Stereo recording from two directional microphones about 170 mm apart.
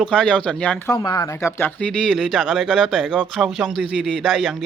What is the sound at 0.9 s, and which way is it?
Speech, 20° left (ahead or behind).